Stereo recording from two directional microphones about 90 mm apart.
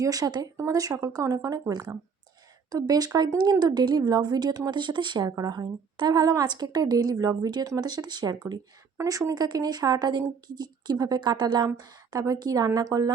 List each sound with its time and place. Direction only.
0.0 s speech: 45° right (ahead or behind)
9.0 s speech: 35° right (ahead or behind); by 11.7 s 55° right (ahead or behind)
11.8 s speech: 45° right (ahead or behind)